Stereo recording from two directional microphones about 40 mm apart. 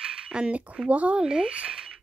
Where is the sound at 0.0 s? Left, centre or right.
Right.